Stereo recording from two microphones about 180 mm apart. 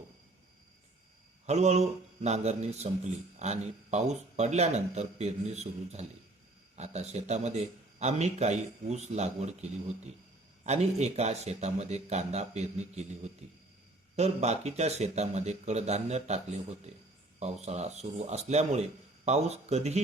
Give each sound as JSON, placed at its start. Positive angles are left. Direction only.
{"t": 1.5, "sound": "a man's voice", "side_deg": -40}